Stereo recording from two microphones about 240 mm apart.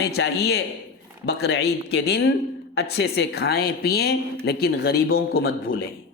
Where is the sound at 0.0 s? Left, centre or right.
Left.